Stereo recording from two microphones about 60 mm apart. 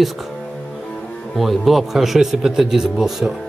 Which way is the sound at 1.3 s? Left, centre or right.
Centre.